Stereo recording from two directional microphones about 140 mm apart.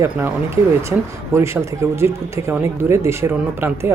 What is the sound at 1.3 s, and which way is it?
Speech, 20° right (ahead or behind).